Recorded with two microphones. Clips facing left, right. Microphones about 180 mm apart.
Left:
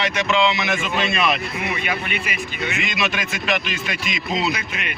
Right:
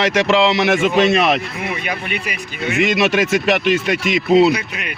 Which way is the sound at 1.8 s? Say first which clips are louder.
Right 2 dB; 40° right (ahead or behind).